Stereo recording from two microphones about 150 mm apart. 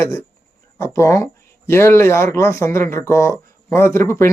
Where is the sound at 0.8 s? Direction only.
20° left (ahead or behind).